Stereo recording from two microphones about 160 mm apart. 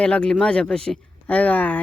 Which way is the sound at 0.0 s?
5° left (ahead or behind).